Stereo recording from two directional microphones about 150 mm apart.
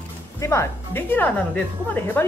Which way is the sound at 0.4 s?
20° left (ahead or behind).